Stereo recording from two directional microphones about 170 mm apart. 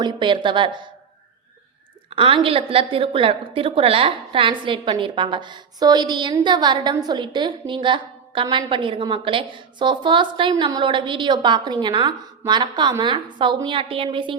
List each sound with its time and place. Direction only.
0.0 s a woman's voice: 30° right (ahead or behind)
2.0 s a woman's voice: 30° right (ahead or behind)